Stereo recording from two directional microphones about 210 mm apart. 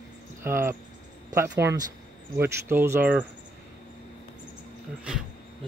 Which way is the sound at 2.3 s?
10° right (ahead or behind).